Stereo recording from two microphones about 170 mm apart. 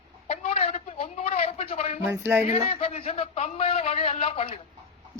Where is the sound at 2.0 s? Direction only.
15° right (ahead or behind).